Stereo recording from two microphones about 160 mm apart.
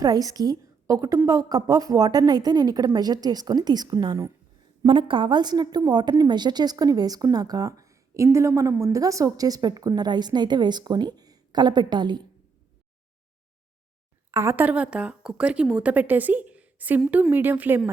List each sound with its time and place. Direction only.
0.0 s a woman's voice: 25° right (ahead or behind)
14.3 s a woman's voice: 15° right (ahead or behind)